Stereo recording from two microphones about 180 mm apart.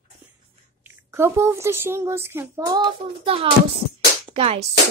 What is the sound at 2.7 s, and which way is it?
Child singing, 25° right (ahead or behind).